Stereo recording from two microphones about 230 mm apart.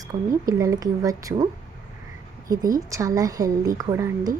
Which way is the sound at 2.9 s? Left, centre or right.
Centre.